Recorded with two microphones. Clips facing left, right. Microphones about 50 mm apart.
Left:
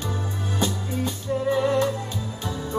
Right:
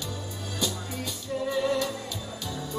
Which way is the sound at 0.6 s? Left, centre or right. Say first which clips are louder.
Left 5 dB; left.